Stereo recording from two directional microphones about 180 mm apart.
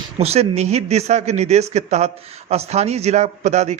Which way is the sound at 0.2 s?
35° right (ahead or behind).